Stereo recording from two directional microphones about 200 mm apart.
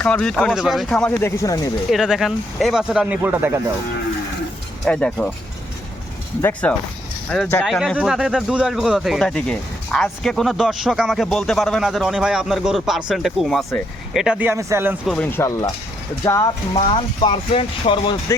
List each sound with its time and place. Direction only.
0.0 s speech: 5° left (ahead or behind)
1.9 s speech: centre (ahead or behind)
4.9 s speech: 5° left (ahead or behind)
6.4 s speech: 5° left (ahead or behind); by 14.9 s 15° right (ahead or behind)
15.0 s speech: 5° left (ahead or behind); by 18.3 s 25° left (ahead or behind)